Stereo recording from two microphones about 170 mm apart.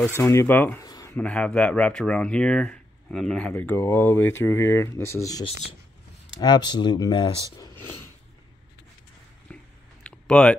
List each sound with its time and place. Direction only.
0.2 s speech: 15° left (ahead or behind)
6.4 s speech: 25° left (ahead or behind)
9.5 s a sound: 10° left (ahead or behind)